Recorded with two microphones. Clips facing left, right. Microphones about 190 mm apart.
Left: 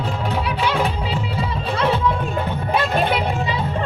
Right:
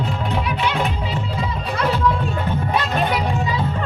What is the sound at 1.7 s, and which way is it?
Music, 25° left (ahead or behind).